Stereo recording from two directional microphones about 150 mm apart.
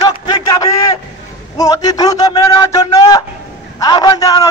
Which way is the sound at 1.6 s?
25° left (ahead or behind).